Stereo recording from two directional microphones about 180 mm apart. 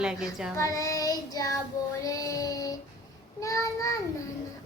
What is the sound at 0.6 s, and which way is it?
Child singing, 20° left (ahead or behind).